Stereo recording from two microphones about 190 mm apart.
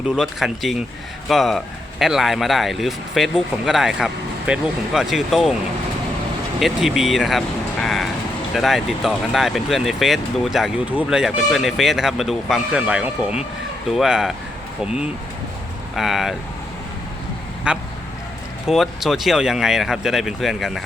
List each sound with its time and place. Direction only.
0.2 s speech: centre (ahead or behind)
6.6 s speech: centre (ahead or behind)
16.0 s speech: centre (ahead or behind)
17.7 s speech: 5° right (ahead or behind)